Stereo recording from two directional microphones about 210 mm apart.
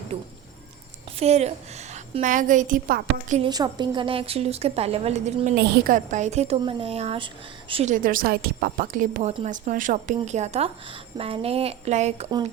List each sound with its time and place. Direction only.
1.2 s a woman's voice: 30° right (ahead or behind)
3.4 s a woman's voice: 20° right (ahead or behind)